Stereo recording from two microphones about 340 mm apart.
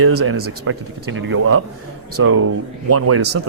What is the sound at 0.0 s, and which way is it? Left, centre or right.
Speech, right.